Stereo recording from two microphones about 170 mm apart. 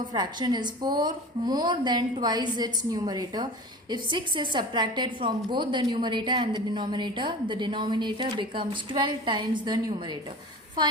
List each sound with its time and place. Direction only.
0.1 s a woman's voice: 25° right (ahead or behind)